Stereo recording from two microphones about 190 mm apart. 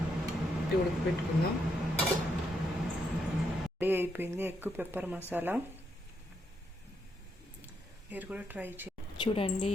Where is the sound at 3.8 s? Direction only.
10° right (ahead or behind).